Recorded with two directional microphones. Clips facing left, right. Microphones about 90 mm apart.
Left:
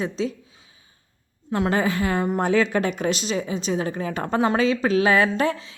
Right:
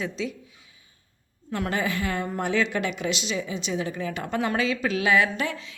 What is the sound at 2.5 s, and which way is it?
Speech, 40° left (ahead or behind).